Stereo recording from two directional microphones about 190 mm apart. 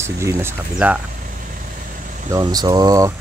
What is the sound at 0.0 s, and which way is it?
Speech, 15° right (ahead or behind).